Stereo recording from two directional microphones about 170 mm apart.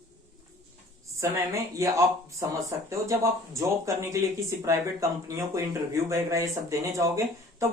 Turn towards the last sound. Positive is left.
turn(degrees=-20)  # may be behind; listen again after turning